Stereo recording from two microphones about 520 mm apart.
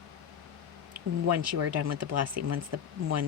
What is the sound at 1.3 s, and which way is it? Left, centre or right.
Speech, right.